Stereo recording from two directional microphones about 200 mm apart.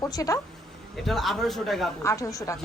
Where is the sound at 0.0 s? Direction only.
15° left (ahead or behind).